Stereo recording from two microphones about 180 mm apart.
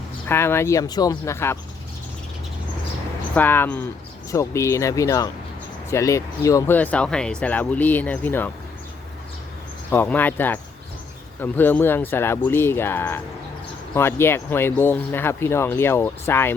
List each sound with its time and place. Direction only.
0.3 s speech: 15° left (ahead or behind)
3.3 s speech: 10° left (ahead or behind)
9.9 s speech: 10° left (ahead or behind)